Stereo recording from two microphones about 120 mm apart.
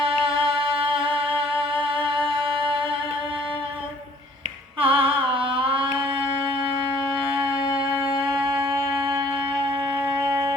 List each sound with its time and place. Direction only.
0.0 s music: 50° right (ahead or behind)
4.8 s a sound: 50° right (ahead or behind)
8.2 s music: 40° right (ahead or behind)
10.1 s shofar: 40° right (ahead or behind)